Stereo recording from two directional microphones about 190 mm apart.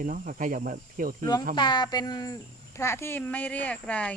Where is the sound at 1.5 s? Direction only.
25° left (ahead or behind); by 4.1 s 5° left (ahead or behind).